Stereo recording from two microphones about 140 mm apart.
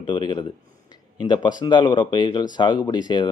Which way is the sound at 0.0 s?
30° left (ahead or behind).